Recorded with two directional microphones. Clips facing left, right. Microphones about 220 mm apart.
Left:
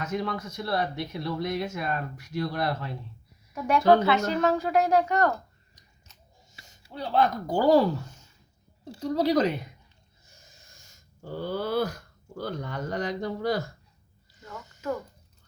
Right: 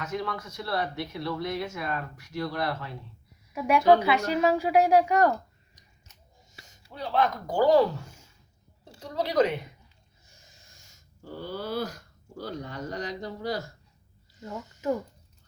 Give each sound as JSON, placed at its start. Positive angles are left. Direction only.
{"t": 0.0, "sound": "speech", "side_deg": 20}
{"t": 3.5, "sound": "a woman's voice", "side_deg": -5}
{"t": 6.9, "sound": "speech", "side_deg": 30}
{"t": 8.0, "sound": "a sound", "side_deg": -10}
{"t": 9.0, "sound": "speech", "side_deg": 40}
{"t": 11.4, "sound": "speech", "side_deg": 55}